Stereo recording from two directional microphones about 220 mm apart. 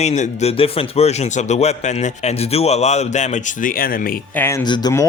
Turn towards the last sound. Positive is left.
turn(degrees=15)  # may be behind; listen again after turning